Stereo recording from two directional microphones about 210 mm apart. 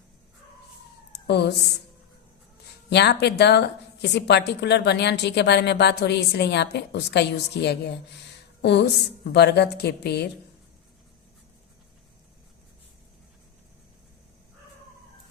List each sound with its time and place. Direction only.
1.1 s a sound: 50° left (ahead or behind)
2.9 s a woman's voice: 55° left (ahead or behind)
9.3 s a woman's voice: 50° left (ahead or behind)